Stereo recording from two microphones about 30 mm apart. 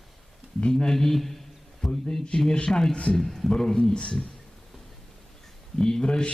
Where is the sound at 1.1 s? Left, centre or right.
Centre.